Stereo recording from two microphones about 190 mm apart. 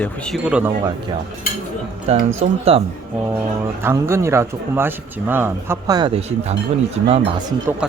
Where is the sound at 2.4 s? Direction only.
35° right (ahead or behind).